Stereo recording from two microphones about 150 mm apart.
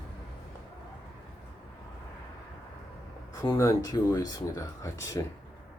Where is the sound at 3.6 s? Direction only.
20° left (ahead or behind).